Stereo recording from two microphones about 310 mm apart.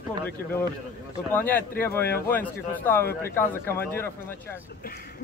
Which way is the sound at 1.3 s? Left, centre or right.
Centre.